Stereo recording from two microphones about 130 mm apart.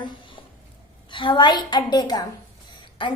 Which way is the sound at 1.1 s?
40° left (ahead or behind).